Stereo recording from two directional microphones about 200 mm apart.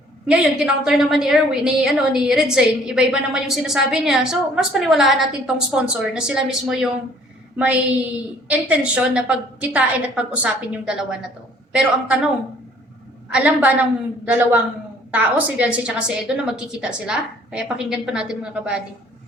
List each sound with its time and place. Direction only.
0.3 s a woman's voice: 5° right (ahead or behind)
13.3 s a woman's voice: 5° right (ahead or behind)